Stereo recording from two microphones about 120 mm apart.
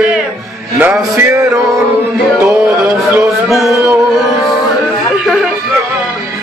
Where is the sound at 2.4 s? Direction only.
20° right (ahead or behind).